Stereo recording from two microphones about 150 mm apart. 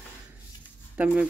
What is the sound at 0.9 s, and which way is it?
Speech, 10° right (ahead or behind).